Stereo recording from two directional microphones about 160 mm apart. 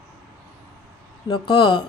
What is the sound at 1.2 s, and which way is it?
Speech, 30° left (ahead or behind).